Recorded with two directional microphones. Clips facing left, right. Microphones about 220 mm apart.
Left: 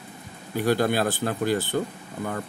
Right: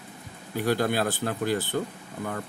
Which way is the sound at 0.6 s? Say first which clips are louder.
Left 3 dB; 40° left (ahead or behind).